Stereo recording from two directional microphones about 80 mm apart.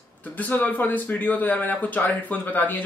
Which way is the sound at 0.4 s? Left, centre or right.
Centre.